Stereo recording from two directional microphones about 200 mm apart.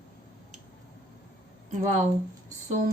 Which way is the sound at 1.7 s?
40° right (ahead or behind).